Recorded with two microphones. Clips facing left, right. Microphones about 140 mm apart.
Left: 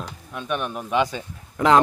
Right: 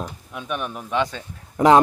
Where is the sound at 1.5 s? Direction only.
25° right (ahead or behind).